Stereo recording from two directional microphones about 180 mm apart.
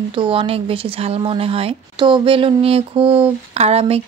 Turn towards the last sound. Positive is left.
turn(degrees=-35)  # may be behind; listen again after turning